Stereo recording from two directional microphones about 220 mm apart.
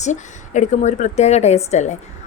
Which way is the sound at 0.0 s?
35° left (ahead or behind).